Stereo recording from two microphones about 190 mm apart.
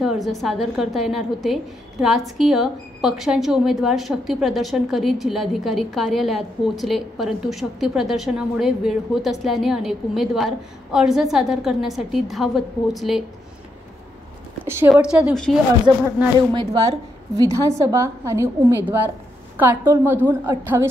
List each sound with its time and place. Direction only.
0.0 s a woman's voice: centre (ahead or behind)
14.9 s a woman's voice: 5° right (ahead or behind)
16.5 s a woman's voice: 25° right (ahead or behind)